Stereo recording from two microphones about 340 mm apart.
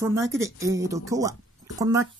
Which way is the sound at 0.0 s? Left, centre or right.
Centre.